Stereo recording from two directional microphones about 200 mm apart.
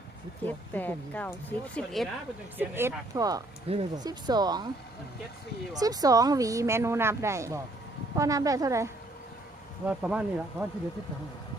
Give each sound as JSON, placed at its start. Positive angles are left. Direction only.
{"t": 0.4, "sound": "speech", "side_deg": 10}
{"t": 2.6, "sound": "speech", "side_deg": -10}
{"t": 5.7, "sound": "speech", "side_deg": -20}